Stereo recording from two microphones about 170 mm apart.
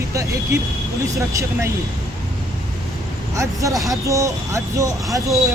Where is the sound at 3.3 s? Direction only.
20° right (ahead or behind).